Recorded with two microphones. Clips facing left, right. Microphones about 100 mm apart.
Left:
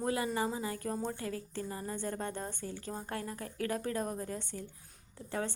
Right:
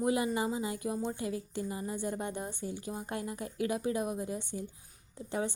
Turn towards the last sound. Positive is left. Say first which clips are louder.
# right 4 dB
turn(degrees=-20)  # may be behind; listen again after turning